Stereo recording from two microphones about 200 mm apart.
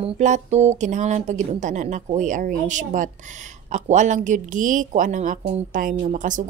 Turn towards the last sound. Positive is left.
turn(degrees=-40)  # may be behind; listen again after turning